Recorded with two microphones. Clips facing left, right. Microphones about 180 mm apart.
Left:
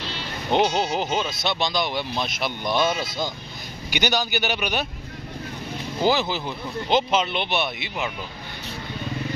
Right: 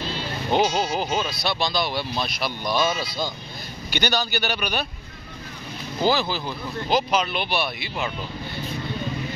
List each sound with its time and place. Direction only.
0.5 s speech: 20° left (ahead or behind)
5.9 s speech: 20° left (ahead or behind)